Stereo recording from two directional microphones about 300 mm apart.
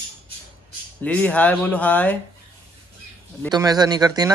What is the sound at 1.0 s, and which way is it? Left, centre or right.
Speech, centre.